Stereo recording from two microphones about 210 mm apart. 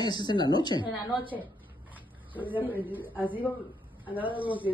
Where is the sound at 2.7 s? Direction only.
10° right (ahead or behind).